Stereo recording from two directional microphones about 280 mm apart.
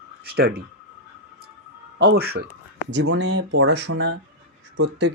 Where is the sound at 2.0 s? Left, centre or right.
Right.